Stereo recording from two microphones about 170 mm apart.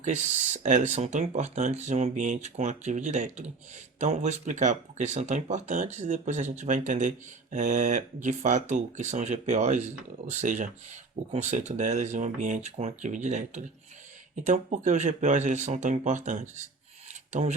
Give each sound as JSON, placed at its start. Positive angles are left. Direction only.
{"t": 0.0, "sound": "speech", "side_deg": -45}